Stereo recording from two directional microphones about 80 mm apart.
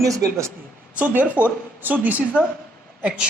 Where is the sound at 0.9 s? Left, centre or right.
Centre.